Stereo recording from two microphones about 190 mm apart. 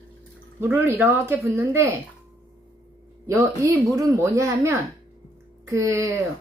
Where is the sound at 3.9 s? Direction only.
15° right (ahead or behind).